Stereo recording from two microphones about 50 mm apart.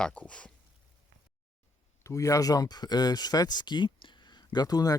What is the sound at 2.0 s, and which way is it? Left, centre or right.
Speech, left.